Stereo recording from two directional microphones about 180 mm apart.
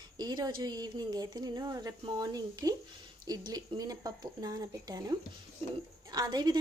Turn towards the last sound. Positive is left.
turn(degrees=-20)  # may be behind; listen again after turning